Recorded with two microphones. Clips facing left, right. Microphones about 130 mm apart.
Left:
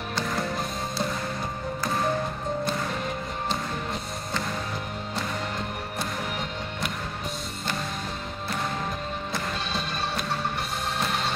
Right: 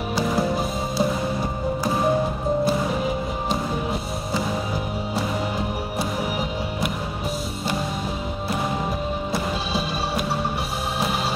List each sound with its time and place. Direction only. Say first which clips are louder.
0.1 s music: right 7 dB; 5° right (ahead or behind)
9.3 s music: right 4 dB; 5° right (ahead or behind)